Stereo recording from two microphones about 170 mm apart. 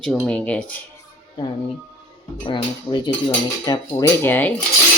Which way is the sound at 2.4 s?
30° left (ahead or behind).